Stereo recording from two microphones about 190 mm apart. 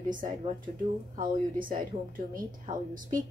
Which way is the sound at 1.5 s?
45° right (ahead or behind).